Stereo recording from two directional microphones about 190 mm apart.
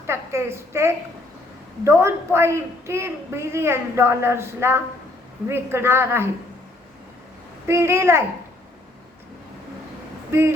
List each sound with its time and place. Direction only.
0.1 s a woman's voice: 15° right (ahead or behind)
7.7 s a woman's voice: 15° right (ahead or behind)